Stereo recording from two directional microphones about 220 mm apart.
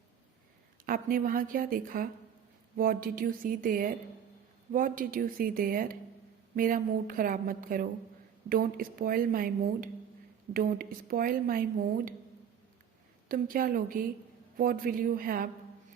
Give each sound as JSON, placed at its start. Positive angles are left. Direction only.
{"t": 0.9, "sound": "a woman's voice", "side_deg": -40}
{"t": 13.2, "sound": "a woman's voice", "side_deg": -40}